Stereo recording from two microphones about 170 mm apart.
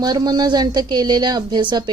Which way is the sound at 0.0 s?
25° right (ahead or behind).